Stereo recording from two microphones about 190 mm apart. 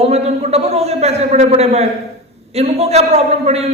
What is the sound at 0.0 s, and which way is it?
A man's voice, 35° right (ahead or behind).